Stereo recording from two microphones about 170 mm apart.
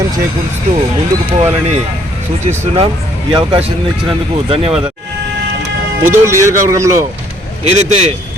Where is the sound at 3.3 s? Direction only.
30° right (ahead or behind).